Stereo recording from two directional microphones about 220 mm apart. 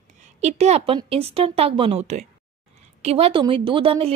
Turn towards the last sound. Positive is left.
turn(degrees=-25)  # may be behind; listen again after turning